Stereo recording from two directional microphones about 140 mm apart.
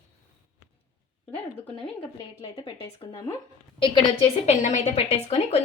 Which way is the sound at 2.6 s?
40° left (ahead or behind).